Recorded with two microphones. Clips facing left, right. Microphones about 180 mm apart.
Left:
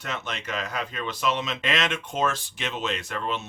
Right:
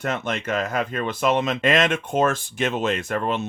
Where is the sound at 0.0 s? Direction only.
50° right (ahead or behind).